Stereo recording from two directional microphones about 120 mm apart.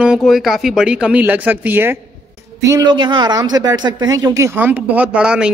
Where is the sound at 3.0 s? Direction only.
40° right (ahead or behind).